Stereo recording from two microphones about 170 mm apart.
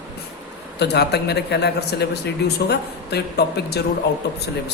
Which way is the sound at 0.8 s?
75° left (ahead or behind).